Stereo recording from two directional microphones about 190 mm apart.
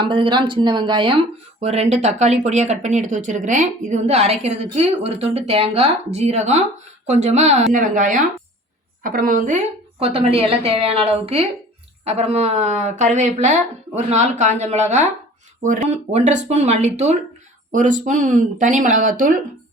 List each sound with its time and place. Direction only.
0.0 s speech: 25° right (ahead or behind); by 9.6 s 45° right (ahead or behind)
10.0 s speech: 30° right (ahead or behind)